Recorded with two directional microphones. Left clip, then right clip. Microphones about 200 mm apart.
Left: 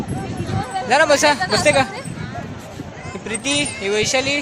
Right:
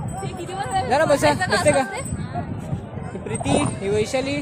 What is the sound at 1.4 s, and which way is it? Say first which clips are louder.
Speech: left 2 dB; 30° right (ahead or behind).